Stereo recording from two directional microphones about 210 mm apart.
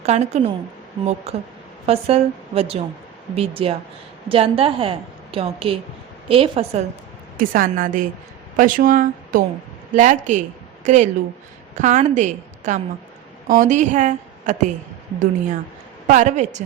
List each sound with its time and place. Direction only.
0.0 s a woman's voice: 30° right (ahead or behind)
7.3 s a woman's voice: 40° right (ahead or behind)
16.0 s a woman's voice: 35° right (ahead or behind)